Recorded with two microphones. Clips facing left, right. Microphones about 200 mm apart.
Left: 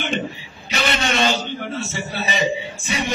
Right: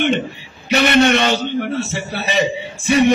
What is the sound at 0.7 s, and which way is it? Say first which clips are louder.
A man's voice: right 10 dB; 65° right (ahead or behind).